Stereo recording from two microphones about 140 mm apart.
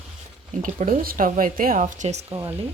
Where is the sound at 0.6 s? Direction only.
80° right; by 2.2 s 55° right (ahead or behind).